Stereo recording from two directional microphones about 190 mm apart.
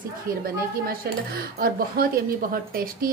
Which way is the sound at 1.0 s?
55° right (ahead or behind).